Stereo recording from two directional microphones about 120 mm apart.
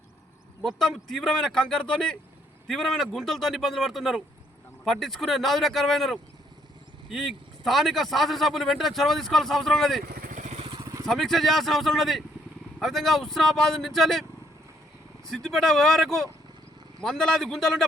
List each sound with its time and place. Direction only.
0.6 s speech: 5° left (ahead or behind)
10.2 s vehicle: 85° right
10.8 s vehicle: 30° right (ahead or behind)
11.0 s speech: 5° left (ahead or behind)
15.3 s speech: 5° left (ahead or behind)